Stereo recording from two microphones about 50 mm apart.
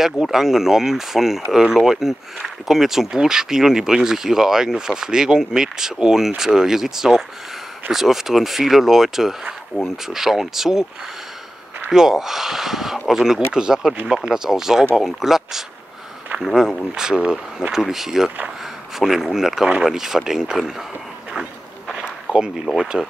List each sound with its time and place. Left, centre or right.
0.0 s speech: centre
11.9 s speech: centre
22.3 s a sound: right
22.8 s speech: centre